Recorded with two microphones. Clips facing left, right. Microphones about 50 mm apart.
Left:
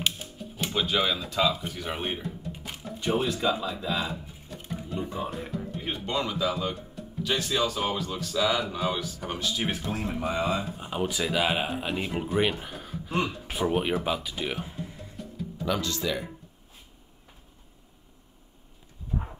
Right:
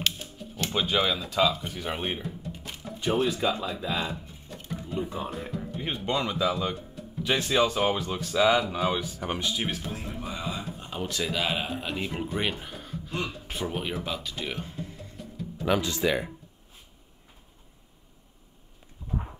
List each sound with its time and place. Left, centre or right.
0.0 s music: centre
0.7 s speech: centre
3.6 s a sound: centre
4.9 s speech: centre
7.2 s speech: right
8.5 s speech: centre
9.9 s speech: left
10.6 s speech: centre
14.0 s music: centre
15.6 s speech: centre